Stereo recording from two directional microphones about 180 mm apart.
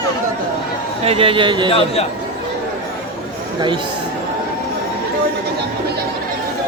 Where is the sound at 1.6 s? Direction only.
35° left (ahead or behind).